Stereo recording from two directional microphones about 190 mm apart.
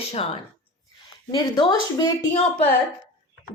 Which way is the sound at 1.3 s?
20° left (ahead or behind).